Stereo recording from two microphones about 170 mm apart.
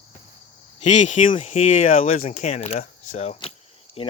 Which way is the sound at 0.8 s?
40° left (ahead or behind).